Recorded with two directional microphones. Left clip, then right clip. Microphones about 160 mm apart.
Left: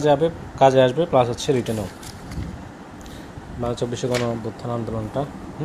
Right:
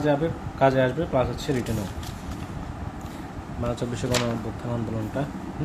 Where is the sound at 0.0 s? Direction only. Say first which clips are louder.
Left 6 dB; 35° left (ahead or behind).